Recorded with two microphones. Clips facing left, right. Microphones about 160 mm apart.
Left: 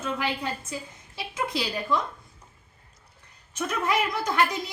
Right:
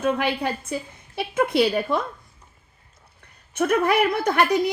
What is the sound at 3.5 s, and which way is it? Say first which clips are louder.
A woman's voice: right 7 dB; 60° right (ahead or behind).